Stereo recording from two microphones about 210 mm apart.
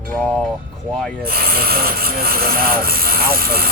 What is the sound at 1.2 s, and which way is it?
Speech, 45° right (ahead or behind).